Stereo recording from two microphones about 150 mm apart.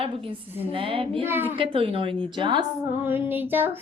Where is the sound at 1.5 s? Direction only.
35° right (ahead or behind).